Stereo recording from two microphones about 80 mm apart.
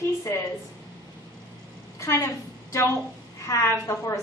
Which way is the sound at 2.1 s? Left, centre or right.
Left.